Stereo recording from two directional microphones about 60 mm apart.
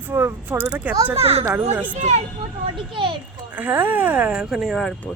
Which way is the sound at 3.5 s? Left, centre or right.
Right.